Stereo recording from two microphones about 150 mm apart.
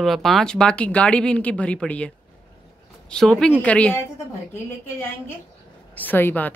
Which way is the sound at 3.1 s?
5° left (ahead or behind).